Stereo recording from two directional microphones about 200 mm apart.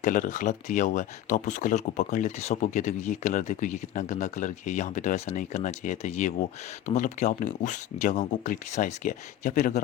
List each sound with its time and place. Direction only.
0.0 s speech: 40° left (ahead or behind)